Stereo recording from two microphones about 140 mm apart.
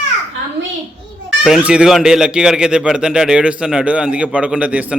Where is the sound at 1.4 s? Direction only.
5° right (ahead or behind).